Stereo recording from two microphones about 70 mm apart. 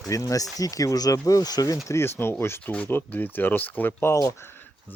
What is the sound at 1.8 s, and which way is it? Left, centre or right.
Speech, left.